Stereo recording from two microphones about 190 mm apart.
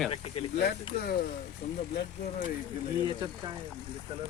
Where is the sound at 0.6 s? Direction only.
55° left (ahead or behind).